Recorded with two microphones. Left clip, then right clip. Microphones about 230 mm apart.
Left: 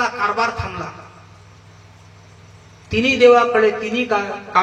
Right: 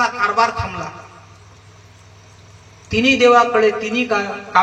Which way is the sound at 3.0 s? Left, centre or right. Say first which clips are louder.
Even; right.